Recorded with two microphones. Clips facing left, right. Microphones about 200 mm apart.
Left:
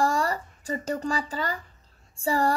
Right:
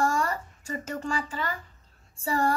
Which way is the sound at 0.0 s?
35° left (ahead or behind).